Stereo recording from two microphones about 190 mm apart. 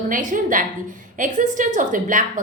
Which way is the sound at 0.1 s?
45° right (ahead or behind).